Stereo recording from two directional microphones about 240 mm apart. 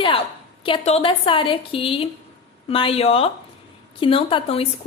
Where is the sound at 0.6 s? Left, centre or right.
Left.